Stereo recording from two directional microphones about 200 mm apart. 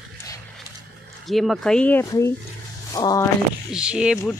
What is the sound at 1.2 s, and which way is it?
Speech, centre (ahead or behind).